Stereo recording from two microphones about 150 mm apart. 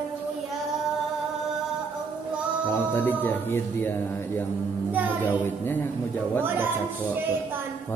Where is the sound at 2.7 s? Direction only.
15° left (ahead or behind).